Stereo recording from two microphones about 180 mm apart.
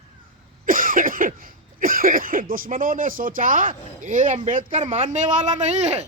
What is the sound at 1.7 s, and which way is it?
Speech, 50° right (ahead or behind).